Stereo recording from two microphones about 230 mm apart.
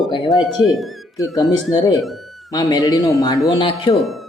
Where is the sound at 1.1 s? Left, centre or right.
Centre.